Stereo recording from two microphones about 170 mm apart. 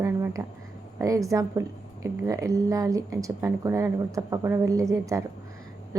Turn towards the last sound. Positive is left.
turn(degrees=-20)  # may be behind; listen again after turning